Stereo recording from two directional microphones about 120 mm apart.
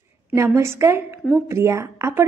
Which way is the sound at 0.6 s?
20° right (ahead or behind).